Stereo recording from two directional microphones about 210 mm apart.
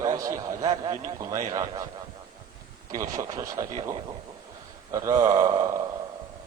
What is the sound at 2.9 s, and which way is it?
A man's voice, 15° right (ahead or behind).